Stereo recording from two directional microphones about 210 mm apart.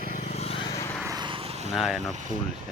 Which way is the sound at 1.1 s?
20° right (ahead or behind).